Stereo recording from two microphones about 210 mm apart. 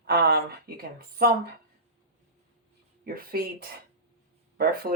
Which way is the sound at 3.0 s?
45° right (ahead or behind).